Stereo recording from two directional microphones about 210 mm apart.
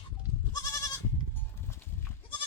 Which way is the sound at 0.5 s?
15° left (ahead or behind).